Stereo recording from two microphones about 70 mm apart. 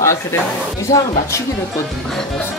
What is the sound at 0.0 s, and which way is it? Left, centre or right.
Speech, left.